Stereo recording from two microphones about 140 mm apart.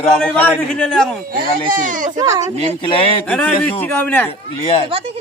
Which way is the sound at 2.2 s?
25° right (ahead or behind).